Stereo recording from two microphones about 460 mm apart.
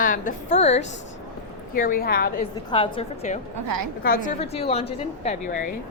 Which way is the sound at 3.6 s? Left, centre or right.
Right.